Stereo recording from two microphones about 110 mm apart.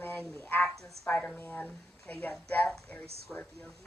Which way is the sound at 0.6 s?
5° left (ahead or behind).